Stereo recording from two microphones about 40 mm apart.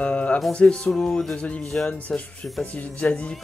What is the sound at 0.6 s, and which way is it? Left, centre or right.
Music, centre.